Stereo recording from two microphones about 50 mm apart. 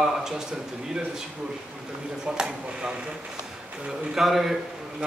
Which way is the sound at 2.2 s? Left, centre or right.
Centre.